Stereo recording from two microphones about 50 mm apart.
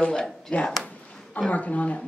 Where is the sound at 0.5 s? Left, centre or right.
Left.